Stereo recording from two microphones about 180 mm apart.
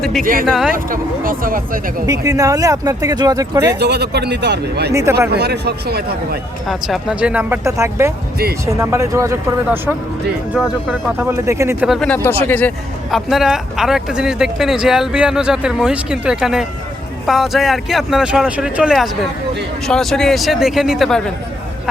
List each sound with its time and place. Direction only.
0.2 s speech: 50° right (ahead or behind)
0.4 s speech: centre (ahead or behind)
0.7 s speech: 50° right (ahead or behind)
2.0 s speech: 20° right (ahead or behind)
3.8 s speech: 65° right (ahead or behind)
6.7 s speech: centre (ahead or behind)
10.5 s speech: centre (ahead or behind)
11.2 s speech: 15° right (ahead or behind)
11.9 s speech: 5° left (ahead or behind)